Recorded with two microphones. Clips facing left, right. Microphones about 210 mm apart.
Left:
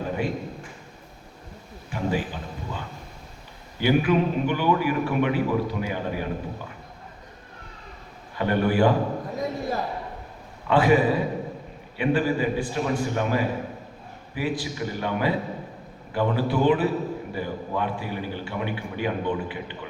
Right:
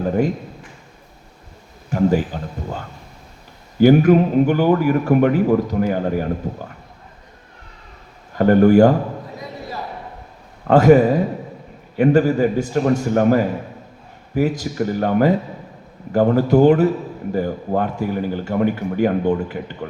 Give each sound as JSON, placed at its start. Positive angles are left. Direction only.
{"t": 1.9, "sound": "a sound", "side_deg": -45}
{"t": 3.8, "sound": "a man's voice", "side_deg": -45}
{"t": 8.3, "sound": "speech", "side_deg": -45}
{"t": 10.7, "sound": "a man's voice", "side_deg": -45}